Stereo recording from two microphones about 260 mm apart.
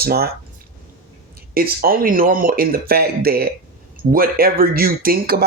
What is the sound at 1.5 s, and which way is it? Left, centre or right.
Speech, right.